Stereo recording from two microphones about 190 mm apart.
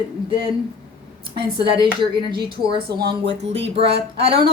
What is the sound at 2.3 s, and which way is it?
Speech, 25° right (ahead or behind).